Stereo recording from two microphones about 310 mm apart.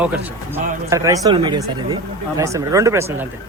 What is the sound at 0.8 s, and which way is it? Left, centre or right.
A man's voice, centre.